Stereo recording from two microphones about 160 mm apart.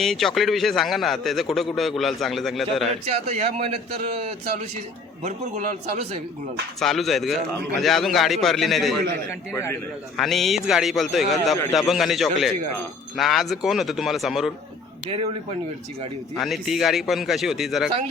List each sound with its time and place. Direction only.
0.0 s a man's voice: centre (ahead or behind)
3.1 s a man's voice: 45° right (ahead or behind)
5.2 s a man's voice: 45° right (ahead or behind)
6.7 s a man's voice: centre (ahead or behind)
10.2 s a man's voice: centre (ahead or behind)
15.0 s speech: 40° right (ahead or behind)
16.3 s a man's voice: centre (ahead or behind)